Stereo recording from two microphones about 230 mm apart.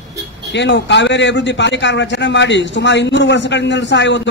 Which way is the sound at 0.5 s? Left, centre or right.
Left.